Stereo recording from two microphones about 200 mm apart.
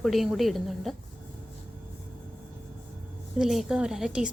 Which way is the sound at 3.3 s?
Centre (ahead or behind).